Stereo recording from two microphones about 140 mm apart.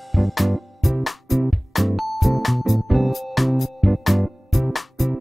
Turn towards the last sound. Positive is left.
turn(degrees=0)  # may be behind; listen again after turning